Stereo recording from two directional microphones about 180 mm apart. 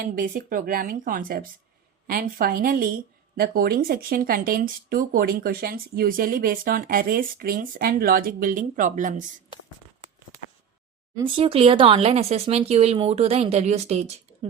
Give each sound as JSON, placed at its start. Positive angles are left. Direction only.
{"t": 0.0, "sound": "a woman's voice", "side_deg": -50}
{"t": 11.2, "sound": "speech", "side_deg": -30}